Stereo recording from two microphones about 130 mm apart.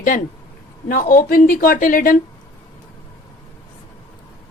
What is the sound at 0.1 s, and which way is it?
A woman's voice, 90° left.